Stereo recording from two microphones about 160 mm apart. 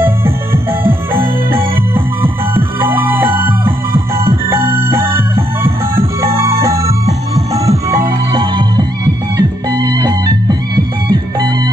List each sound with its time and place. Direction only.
0.0 s music: 15° right (ahead or behind)